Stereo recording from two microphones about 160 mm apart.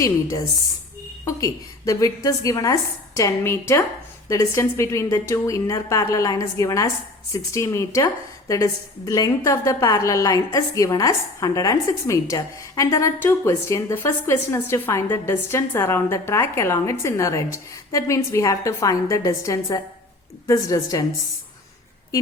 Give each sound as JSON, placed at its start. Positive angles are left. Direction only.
{"t": 0.0, "sound": "a woman's voice", "side_deg": 20}